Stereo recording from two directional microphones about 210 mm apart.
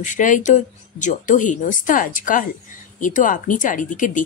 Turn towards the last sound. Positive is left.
turn(degrees=40)  # may be behind; listen again after turning